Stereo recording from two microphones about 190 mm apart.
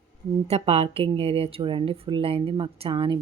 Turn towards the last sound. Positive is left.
turn(degrees=-25)  # may be behind; listen again after turning